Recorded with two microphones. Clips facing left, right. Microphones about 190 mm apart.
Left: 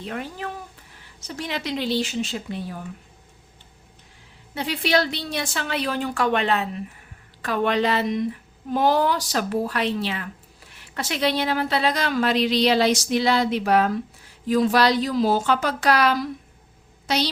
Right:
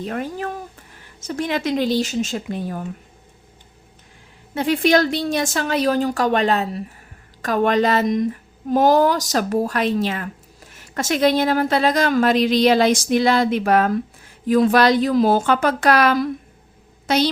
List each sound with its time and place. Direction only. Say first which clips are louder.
0.0 s speech: right 5 dB; 45° right (ahead or behind)
4.5 s speech: right 6 dB; 50° right (ahead or behind)